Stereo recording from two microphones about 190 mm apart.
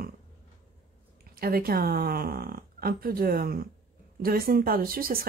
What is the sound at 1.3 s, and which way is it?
Speech, 50° right (ahead or behind).